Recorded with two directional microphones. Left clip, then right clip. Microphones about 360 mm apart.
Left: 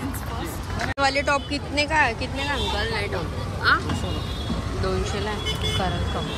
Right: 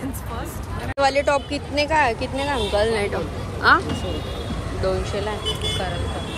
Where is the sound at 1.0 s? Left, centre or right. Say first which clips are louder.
Right 4 dB; centre.